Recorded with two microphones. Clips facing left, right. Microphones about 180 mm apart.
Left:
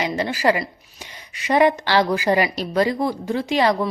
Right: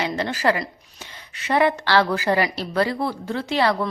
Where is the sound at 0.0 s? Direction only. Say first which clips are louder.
Left 2 dB; 10° left (ahead or behind).